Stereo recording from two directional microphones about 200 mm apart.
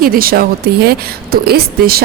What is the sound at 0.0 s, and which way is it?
A woman's voice, 45° right (ahead or behind).